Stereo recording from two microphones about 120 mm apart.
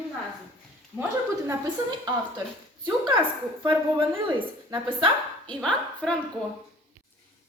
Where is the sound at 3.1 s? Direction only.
45° right (ahead or behind).